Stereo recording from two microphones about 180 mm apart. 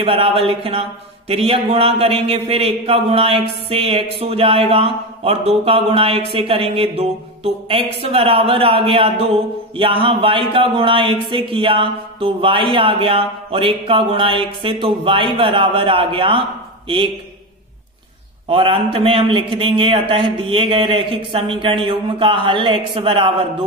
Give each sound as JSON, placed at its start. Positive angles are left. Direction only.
{"t": 0.0, "sound": "a man's voice", "side_deg": -30}
{"t": 18.5, "sound": "a man's voice", "side_deg": -30}